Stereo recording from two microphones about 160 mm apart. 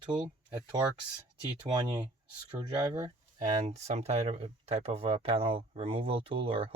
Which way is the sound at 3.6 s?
45° right (ahead or behind).